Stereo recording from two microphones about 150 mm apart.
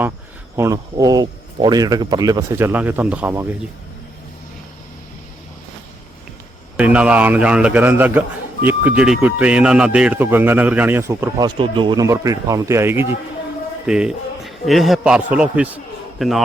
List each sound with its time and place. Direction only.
0.5 s speech: 20° right (ahead or behind)
6.7 s speech: 10° right (ahead or behind)
11.4 s speech: 35° right (ahead or behind)
12.0 s speech: 20° right (ahead or behind)
13.8 s a man's voice: 5° right (ahead or behind)